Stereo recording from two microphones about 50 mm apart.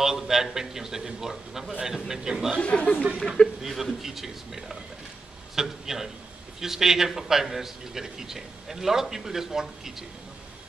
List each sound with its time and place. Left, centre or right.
0.0 s a man's voice: centre
2.6 s speech: left
3.6 s a man's voice: centre